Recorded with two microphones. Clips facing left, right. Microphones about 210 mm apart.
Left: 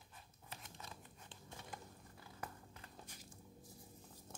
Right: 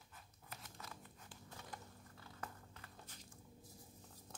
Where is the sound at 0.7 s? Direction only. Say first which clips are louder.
Even; 20° left (ahead or behind).